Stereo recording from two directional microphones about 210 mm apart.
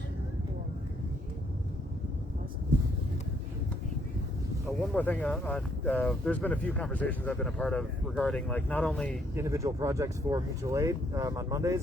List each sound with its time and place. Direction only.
4.9 s speech: 5° left (ahead or behind)
9.3 s speech: 15° right (ahead or behind)